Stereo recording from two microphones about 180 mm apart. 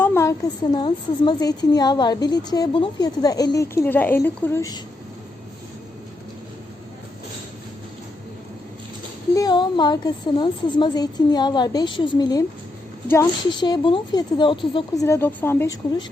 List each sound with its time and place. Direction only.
0.0 s a woman's voice: 15° left (ahead or behind)
9.3 s a woman's voice: 20° left (ahead or behind)
13.5 s a woman's voice: 25° left (ahead or behind)
15.0 s a woman's voice: 15° left (ahead or behind)